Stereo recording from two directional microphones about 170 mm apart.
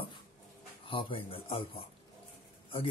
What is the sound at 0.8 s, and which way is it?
Speech, 30° left (ahead or behind).